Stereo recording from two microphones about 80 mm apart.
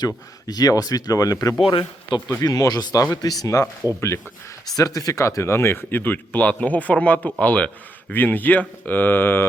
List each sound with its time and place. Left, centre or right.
0.4 s speech: left
1.7 s speech: left
2.4 s speech: left
4.7 s speech: left